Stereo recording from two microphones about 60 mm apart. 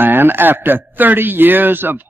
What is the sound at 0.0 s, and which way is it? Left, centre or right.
Speech, right.